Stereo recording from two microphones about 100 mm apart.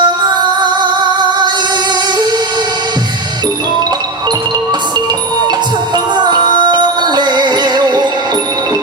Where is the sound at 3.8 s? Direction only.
45° right (ahead or behind).